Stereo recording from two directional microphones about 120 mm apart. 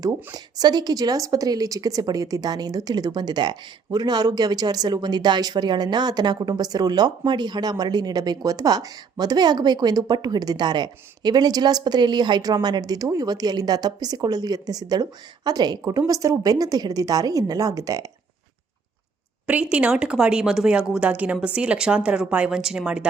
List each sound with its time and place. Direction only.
0.0 s a woman's voice: 30° right (ahead or behind)
19.7 s a woman's voice: 10° right (ahead or behind)